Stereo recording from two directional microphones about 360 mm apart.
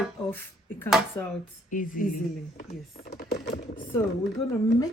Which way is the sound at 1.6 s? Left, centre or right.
Left.